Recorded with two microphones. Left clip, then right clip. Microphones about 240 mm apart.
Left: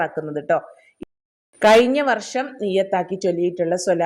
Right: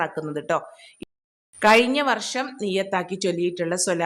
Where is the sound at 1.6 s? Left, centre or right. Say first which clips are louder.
Left 3 dB; centre.